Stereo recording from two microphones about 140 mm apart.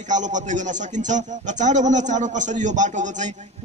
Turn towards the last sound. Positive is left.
turn(degrees=-60)  # may be behind; listen again after turning